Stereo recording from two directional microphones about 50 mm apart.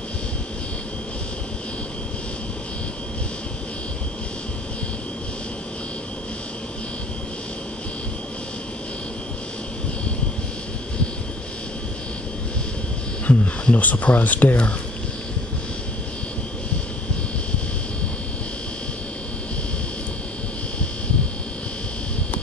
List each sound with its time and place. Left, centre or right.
13.3 s speech: left